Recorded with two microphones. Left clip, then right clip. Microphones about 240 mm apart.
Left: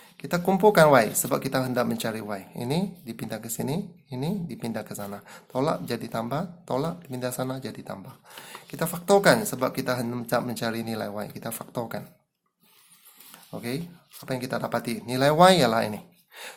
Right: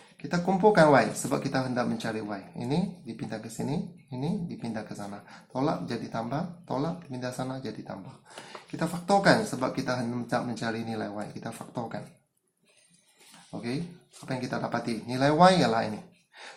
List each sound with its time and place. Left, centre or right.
0.2 s speech: left
13.5 s speech: left